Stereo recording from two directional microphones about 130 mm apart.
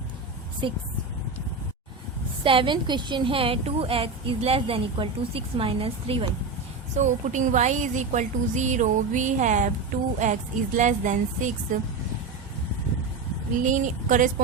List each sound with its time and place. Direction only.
0.6 s speech: 40° right (ahead or behind)
2.4 s a woman's voice: 40° right (ahead or behind)
6.9 s a woman's voice: 65° right (ahead or behind)
13.7 s a woman's voice: 75° right (ahead or behind)